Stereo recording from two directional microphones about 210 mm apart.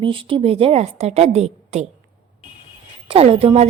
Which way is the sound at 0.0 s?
25° right (ahead or behind).